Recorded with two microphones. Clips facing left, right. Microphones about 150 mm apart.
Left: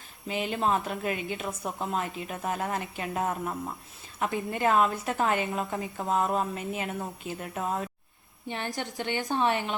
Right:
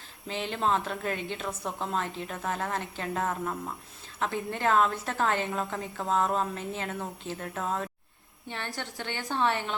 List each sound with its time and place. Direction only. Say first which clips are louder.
0.3 s a woman's voice: left 1 dB; 10° left (ahead or behind)